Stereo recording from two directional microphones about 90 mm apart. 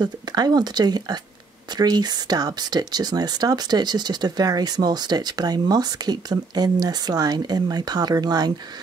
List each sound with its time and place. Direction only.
0.0 s speech: 50° right (ahead or behind)